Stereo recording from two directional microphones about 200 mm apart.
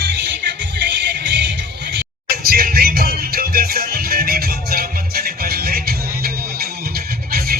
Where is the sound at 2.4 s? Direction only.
50° right (ahead or behind).